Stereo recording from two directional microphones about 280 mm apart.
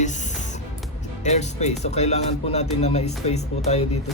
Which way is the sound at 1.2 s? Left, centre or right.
Left.